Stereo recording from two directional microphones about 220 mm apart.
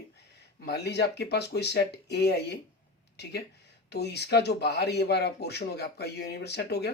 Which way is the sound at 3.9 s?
50° left (ahead or behind).